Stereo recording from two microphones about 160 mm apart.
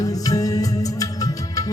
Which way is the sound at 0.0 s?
20° left (ahead or behind).